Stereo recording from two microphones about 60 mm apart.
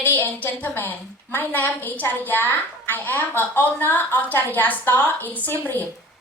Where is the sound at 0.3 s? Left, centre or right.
Left.